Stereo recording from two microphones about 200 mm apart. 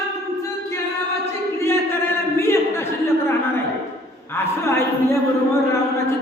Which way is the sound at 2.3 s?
10° left (ahead or behind).